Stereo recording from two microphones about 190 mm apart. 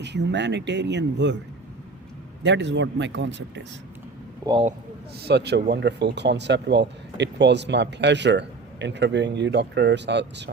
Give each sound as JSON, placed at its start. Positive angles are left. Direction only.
{"t": 0.0, "sound": "speech", "side_deg": -65}
{"t": 2.4, "sound": "speech", "side_deg": -70}
{"t": 4.4, "sound": "speech", "side_deg": -20}
{"t": 5.2, "sound": "speech", "side_deg": -60}